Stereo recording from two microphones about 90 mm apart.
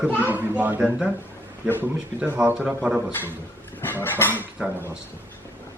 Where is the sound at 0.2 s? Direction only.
20° right (ahead or behind).